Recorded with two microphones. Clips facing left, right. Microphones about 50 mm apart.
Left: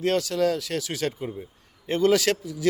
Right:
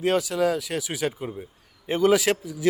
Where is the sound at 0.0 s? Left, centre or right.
Centre.